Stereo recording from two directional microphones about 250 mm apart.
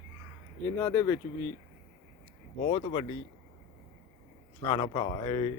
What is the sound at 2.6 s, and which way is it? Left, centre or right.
Speech, left.